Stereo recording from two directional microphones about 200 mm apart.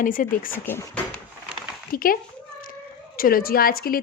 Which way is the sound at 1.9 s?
45° left (ahead or behind).